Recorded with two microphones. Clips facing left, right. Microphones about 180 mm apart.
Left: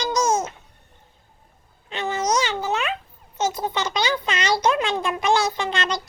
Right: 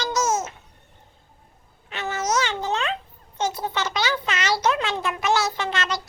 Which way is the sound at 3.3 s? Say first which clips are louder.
Left 2 dB; 10° left (ahead or behind).